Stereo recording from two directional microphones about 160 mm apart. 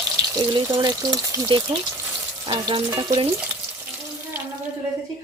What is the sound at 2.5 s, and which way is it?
Frying, 35° right (ahead or behind).